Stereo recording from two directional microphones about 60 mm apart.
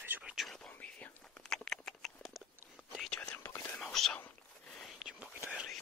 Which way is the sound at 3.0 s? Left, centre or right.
Centre.